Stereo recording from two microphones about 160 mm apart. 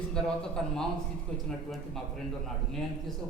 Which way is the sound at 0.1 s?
5° left (ahead or behind).